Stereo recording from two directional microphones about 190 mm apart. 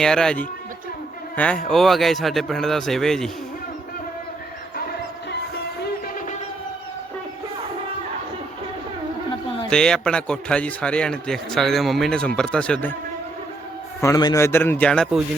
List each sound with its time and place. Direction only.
0.0 s a man's voice: 5° left (ahead or behind)
1.6 s a man's voice: centre (ahead or behind)
5.8 s music: 45° left (ahead or behind)
9.6 s a man's voice: 5° left (ahead or behind)
14.0 s a man's voice: 20° left (ahead or behind); by 15.2 s 5° left (ahead or behind)